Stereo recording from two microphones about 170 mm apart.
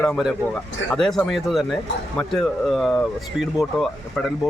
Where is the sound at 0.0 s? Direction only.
Centre (ahead or behind).